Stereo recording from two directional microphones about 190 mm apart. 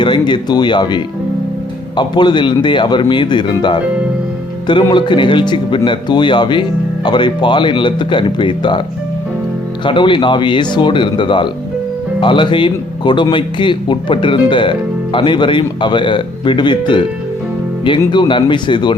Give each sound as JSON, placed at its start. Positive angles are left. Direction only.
{"t": 0.0, "sound": "speech", "side_deg": 25}
{"t": 9.8, "sound": "speech", "side_deg": 25}